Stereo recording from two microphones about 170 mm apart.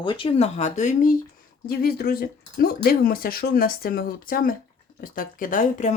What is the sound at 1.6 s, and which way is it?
Speech, 65° left (ahead or behind).